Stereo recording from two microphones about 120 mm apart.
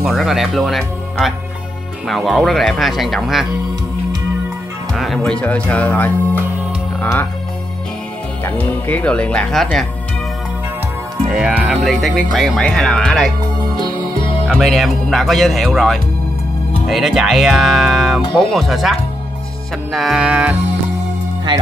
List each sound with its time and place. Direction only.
0.0 s speech: 5° right (ahead or behind)
4.9 s speech: centre (ahead or behind); by 7.2 s 15° left (ahead or behind)
8.5 s speech: 15° left (ahead or behind)
11.2 s music: 10° right (ahead or behind)
11.8 s speech: centre (ahead or behind)
14.5 s speech: centre (ahead or behind)
19.9 s music: centre (ahead or behind)